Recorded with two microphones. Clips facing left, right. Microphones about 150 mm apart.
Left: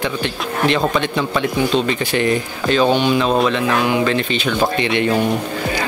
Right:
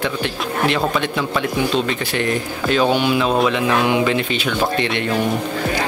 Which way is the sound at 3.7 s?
20° right (ahead or behind).